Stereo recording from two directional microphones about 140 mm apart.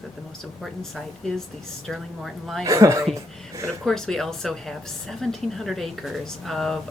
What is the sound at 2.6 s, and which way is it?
Speech, 25° right (ahead or behind).